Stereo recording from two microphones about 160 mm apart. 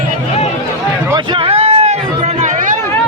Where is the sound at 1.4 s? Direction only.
40° right (ahead or behind).